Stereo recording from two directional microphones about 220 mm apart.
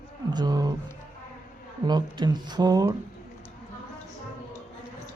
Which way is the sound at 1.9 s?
20° right (ahead or behind).